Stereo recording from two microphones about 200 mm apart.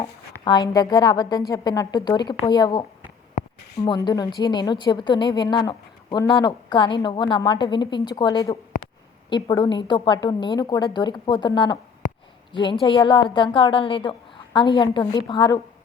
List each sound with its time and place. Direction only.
0.4 s a woman's voice: 20° left (ahead or behind)
12.9 s a woman's voice: 20° left (ahead or behind)